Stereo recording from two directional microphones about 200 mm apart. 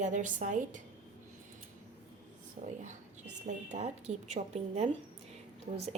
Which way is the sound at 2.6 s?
40° right (ahead or behind).